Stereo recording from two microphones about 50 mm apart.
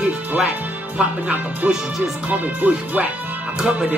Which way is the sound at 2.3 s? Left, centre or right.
Right.